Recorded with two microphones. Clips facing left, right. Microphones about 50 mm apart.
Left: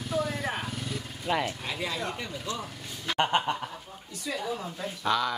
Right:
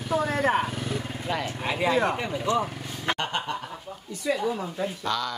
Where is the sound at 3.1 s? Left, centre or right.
Centre.